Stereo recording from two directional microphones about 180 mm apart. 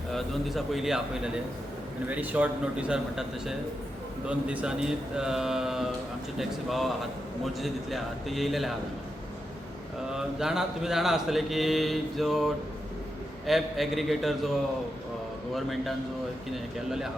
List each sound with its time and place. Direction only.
0.1 s mantra: centre (ahead or behind)
2.0 s a man's voice: 10° right (ahead or behind)
4.3 s mantra: 5° right (ahead or behind)
10.2 s mantra: 5° right (ahead or behind)
13.5 s mantra: centre (ahead or behind)
15.5 s mantra: centre (ahead or behind)